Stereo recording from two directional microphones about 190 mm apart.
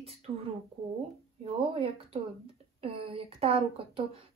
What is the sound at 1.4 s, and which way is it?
A woman's voice, 30° right (ahead or behind).